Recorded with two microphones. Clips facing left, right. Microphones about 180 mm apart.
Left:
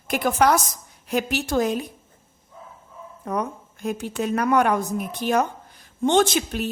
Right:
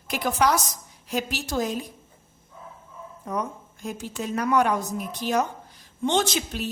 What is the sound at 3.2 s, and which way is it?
A woman's voice, 60° left (ahead or behind).